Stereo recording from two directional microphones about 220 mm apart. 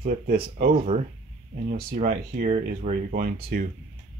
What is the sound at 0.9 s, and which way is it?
Speech, 30° right (ahead or behind).